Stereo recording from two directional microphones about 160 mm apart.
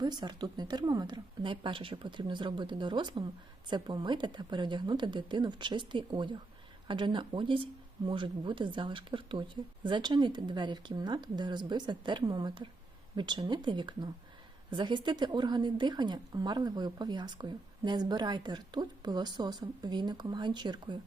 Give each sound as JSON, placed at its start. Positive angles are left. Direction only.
{"t": 0.0, "sound": "a woman's voice", "side_deg": -25}